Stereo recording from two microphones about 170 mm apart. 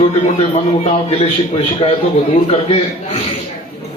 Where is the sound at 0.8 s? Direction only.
35° left (ahead or behind).